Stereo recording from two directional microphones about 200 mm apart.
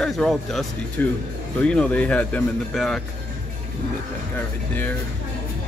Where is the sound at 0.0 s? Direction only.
Centre (ahead or behind).